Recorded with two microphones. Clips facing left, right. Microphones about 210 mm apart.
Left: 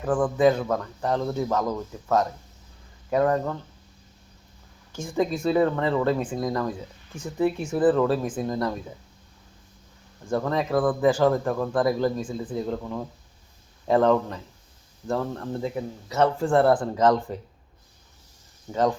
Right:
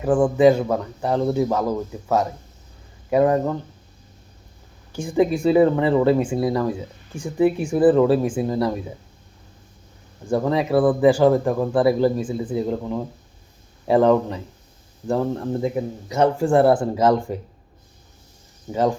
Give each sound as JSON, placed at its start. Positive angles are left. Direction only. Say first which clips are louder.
{"t": 0.0, "sound": "speech", "louder": "right 5 dB", "side_deg": -15}
{"t": 4.9, "sound": "speech", "louder": "right 6 dB", "side_deg": -15}
{"t": 8.0, "sound": "speech", "louder": "right 6 dB", "side_deg": -5}
{"t": 10.2, "sound": "speech", "louder": "right 5 dB", "side_deg": -15}
{"t": 18.7, "sound": "speech", "louder": "right 3 dB", "side_deg": -10}